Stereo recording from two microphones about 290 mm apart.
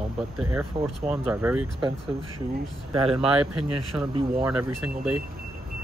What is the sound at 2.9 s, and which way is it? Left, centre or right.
Speech, centre.